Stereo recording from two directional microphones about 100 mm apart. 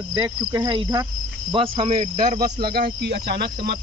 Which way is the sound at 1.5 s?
65° right (ahead or behind).